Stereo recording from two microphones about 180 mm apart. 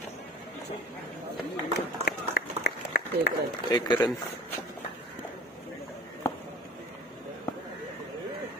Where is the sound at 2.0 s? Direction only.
60° left (ahead or behind).